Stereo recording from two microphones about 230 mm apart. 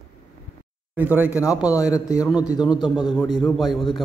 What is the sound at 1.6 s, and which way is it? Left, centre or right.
Speech, centre.